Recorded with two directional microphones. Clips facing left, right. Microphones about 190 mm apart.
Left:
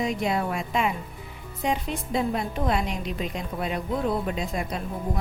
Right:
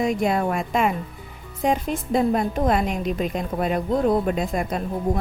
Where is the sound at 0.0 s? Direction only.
50° right (ahead or behind).